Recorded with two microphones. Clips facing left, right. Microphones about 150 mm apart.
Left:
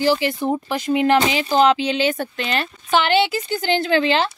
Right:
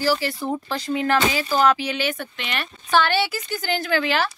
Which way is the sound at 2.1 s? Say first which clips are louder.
Left 6 dB; 35° left (ahead or behind).